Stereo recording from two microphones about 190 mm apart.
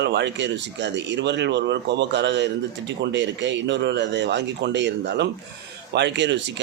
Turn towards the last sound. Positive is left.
turn(degrees=-70)  # may be behind; listen again after turning